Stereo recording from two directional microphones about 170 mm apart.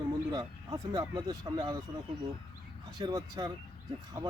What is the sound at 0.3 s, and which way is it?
Speech, 25° right (ahead or behind).